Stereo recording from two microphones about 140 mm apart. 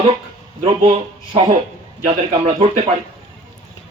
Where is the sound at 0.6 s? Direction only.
45° right (ahead or behind).